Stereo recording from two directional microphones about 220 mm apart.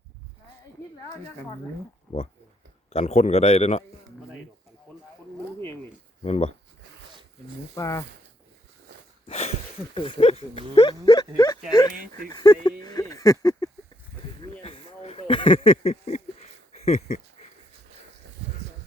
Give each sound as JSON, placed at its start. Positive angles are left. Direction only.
{"t": 2.9, "sound": "a man's voice", "side_deg": 30}
{"t": 6.2, "sound": "a man's voice", "side_deg": 30}
{"t": 7.8, "sound": "speech", "side_deg": 15}
{"t": 9.2, "sound": "a man's voice", "side_deg": 30}
{"t": 14.6, "sound": "a sound", "side_deg": 30}
{"t": 16.8, "sound": "a man's voice", "side_deg": 30}